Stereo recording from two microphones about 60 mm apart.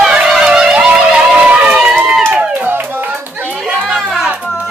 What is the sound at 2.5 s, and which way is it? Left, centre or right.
Music, right.